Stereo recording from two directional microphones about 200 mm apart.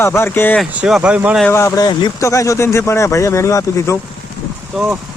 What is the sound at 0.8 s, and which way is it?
Speech, 5° right (ahead or behind).